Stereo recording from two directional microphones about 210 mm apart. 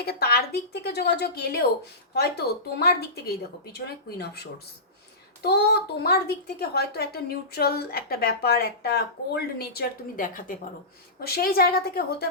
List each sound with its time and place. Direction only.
0.0 s a child's voice: 50° left (ahead or behind)